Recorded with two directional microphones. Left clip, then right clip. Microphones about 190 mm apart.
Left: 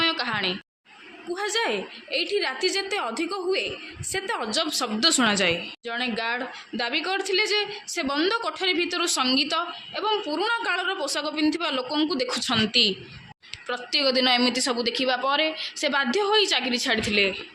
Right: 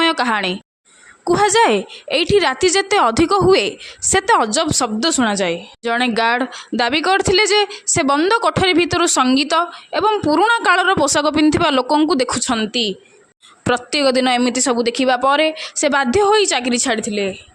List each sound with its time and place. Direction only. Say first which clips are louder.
0.0 s a woman's voice: right 8 dB; 45° right (ahead or behind)
1.3 s a woman's voice: right 13 dB; 55° right (ahead or behind); by 5.6 s 35° right (ahead or behind)
5.8 s speech: right 16 dB; 55° right (ahead or behind)
12.5 s a woman's voice: right 1 dB; 35° right (ahead or behind)
13.7 s speech: right 8 dB; 50° right (ahead or behind); by 17.4 s 30° right (ahead or behind)